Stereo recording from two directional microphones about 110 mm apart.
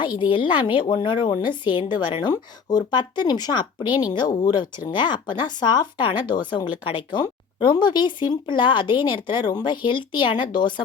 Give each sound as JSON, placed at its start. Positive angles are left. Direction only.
{"t": 0.0, "sound": "a woman's voice", "side_deg": 45}